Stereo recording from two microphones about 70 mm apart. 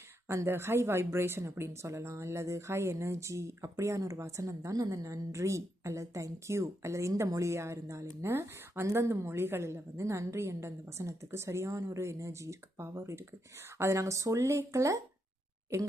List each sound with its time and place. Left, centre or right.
0.3 s a woman's voice: right